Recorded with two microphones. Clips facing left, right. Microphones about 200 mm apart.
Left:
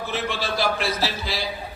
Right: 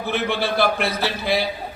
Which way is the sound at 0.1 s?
60° right (ahead or behind).